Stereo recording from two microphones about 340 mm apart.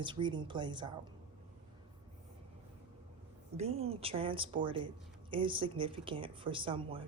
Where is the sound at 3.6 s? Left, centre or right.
Centre.